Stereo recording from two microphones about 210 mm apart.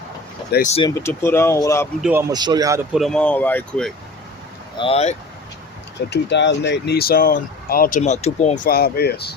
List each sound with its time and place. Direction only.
0.5 s speech: 35° left (ahead or behind)
0.8 s speech: 15° left (ahead or behind)
2.0 s speech: 5° right (ahead or behind)
2.3 s a man's voice: 20° right (ahead or behind)
2.9 s speech: centre (ahead or behind)
4.8 s speech: 30° left (ahead or behind)
6.1 s speech: 55° left (ahead or behind); by 8.5 s 30° left (ahead or behind)
8.6 s speech: 45° left (ahead or behind)